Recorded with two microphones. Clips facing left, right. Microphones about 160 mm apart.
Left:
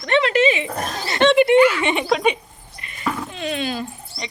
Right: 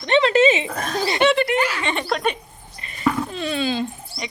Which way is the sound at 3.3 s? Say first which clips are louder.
Right 2 dB; 35° right (ahead or behind).